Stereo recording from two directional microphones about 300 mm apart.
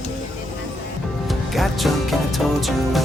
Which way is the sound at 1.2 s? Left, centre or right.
Centre.